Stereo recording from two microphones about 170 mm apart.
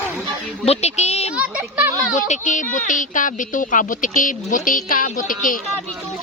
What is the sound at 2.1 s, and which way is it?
Speech, 45° left (ahead or behind).